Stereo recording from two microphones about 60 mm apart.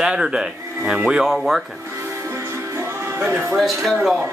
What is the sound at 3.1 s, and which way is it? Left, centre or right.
Speech, right.